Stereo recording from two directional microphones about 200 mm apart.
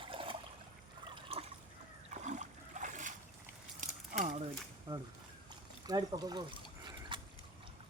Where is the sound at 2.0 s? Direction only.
35° right (ahead or behind).